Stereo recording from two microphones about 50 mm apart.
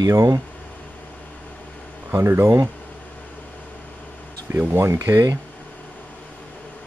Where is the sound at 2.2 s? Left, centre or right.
Right.